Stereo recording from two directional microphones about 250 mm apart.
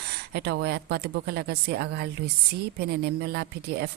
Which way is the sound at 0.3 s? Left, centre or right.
Right.